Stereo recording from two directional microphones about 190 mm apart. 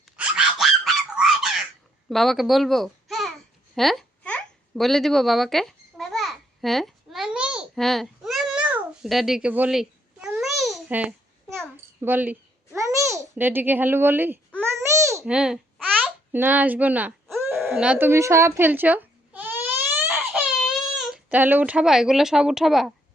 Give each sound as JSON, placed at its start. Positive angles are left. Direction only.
{"t": 0.2, "sound": "dog", "side_deg": -5}
{"t": 2.0, "sound": "a child's voice", "side_deg": 0}
{"t": 3.8, "sound": "babbling", "side_deg": 0}
{"t": 15.3, "sound": "a child's voice", "side_deg": -5}
{"t": 17.5, "sound": "a sound", "side_deg": -10}
{"t": 20.6, "sound": "speech", "side_deg": 0}